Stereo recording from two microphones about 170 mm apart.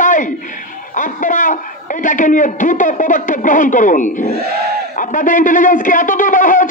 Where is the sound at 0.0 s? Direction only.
50° left (ahead or behind).